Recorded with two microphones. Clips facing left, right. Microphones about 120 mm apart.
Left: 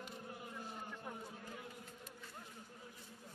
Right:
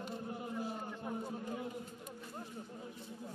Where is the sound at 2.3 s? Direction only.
35° right (ahead or behind).